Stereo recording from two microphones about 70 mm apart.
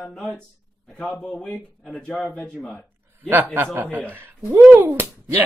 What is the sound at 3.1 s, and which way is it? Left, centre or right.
A man's voice, right.